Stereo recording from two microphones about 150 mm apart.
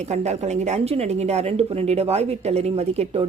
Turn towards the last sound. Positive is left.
turn(degrees=-45)  # may be behind; listen again after turning